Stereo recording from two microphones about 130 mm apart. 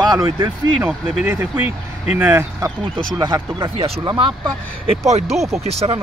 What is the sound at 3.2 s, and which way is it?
Speech, 35° right (ahead or behind).